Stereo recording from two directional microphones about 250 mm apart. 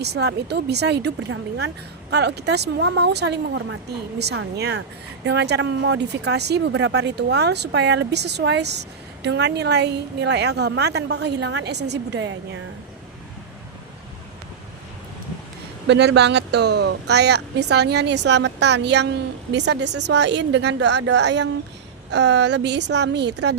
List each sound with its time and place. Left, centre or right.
0.0 s speech: right
15.9 s speech: right